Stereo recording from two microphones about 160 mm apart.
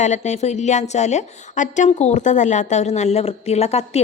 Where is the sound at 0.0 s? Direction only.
45° left (ahead or behind).